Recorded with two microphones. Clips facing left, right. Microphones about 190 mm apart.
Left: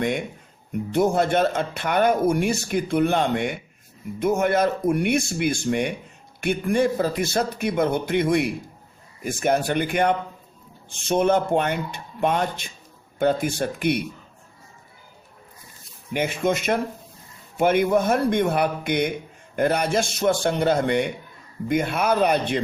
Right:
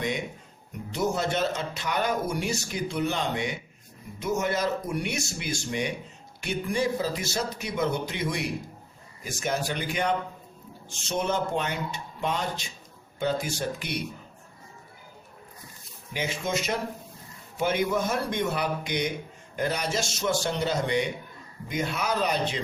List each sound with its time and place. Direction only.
0.9 s speech: 55° left (ahead or behind)
16.1 s speech: 55° left (ahead or behind)